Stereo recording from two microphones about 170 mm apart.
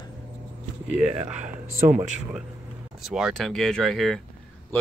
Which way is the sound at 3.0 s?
5° right (ahead or behind).